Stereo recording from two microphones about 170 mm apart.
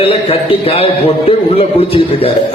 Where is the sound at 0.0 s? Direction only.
35° left (ahead or behind).